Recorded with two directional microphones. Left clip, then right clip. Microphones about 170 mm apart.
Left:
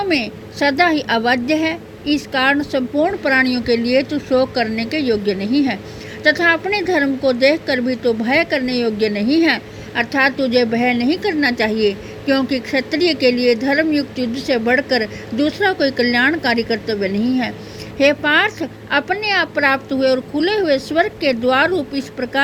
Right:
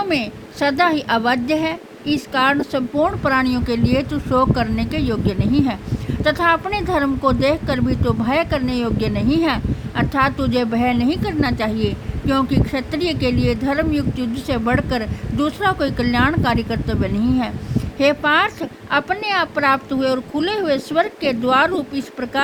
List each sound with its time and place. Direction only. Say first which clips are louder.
0.1 s speech: left 2 dB; 40° right (ahead or behind)